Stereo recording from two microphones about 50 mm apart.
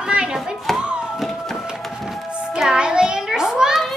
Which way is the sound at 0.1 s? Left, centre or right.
Centre.